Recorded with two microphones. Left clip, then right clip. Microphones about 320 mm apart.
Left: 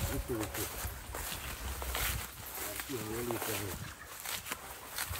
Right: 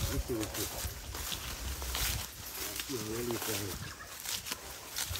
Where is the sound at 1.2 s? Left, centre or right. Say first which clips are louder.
Right 4 dB; centre.